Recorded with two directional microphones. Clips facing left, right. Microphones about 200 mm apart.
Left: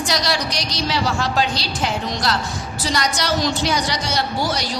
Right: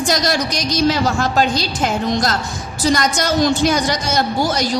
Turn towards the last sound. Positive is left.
turn(degrees=-45)  # may be behind; listen again after turning